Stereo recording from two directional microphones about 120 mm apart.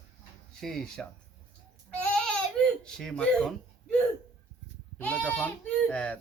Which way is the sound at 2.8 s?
5° left (ahead or behind).